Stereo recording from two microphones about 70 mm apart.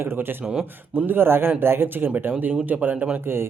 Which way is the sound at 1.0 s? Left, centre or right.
Right.